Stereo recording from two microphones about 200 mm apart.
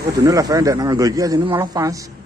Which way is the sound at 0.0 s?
15° right (ahead or behind).